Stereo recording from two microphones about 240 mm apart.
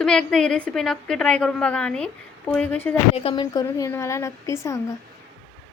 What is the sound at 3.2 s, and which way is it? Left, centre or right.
A woman's voice, centre.